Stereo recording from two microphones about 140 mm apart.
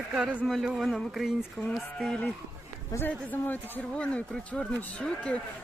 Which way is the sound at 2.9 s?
15° left (ahead or behind).